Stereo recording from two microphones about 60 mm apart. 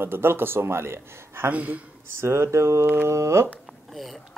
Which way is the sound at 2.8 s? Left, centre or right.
Right.